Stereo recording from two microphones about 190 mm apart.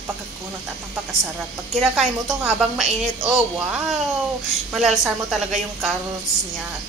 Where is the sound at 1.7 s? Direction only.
Centre (ahead or behind).